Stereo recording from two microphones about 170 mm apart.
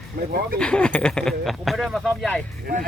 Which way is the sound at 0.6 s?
5° left (ahead or behind).